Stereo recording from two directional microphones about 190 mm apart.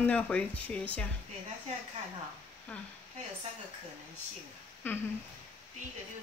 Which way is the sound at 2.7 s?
10° left (ahead or behind).